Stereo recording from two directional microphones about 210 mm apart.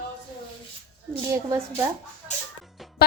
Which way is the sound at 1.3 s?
10° right (ahead or behind).